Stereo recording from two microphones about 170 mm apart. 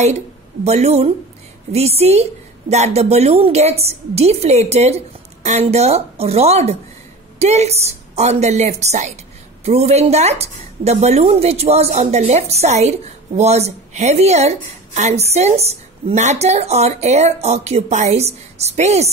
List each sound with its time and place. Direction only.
0.7 s a woman's voice: 40° right (ahead or behind)